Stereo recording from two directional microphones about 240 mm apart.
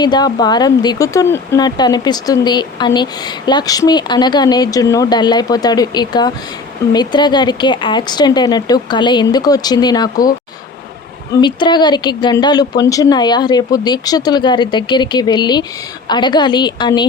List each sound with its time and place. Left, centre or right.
0.0 s speech: centre
11.3 s a woman's voice: centre